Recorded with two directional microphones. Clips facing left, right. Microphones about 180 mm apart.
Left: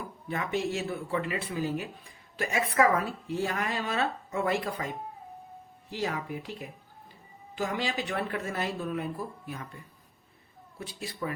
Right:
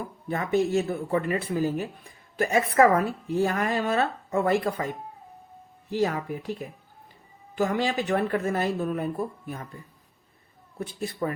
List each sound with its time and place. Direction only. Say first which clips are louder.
0.3 s speech: right 6 dB; 40° right (ahead or behind)
5.9 s speech: right 7 dB; 45° right (ahead or behind)
7.5 s speech: right 6 dB; 50° right (ahead or behind)
10.8 s speech: right 7 dB; 50° right (ahead or behind)